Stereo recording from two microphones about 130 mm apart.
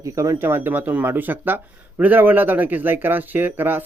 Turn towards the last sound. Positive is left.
turn(degrees=-15)  # may be behind; listen again after turning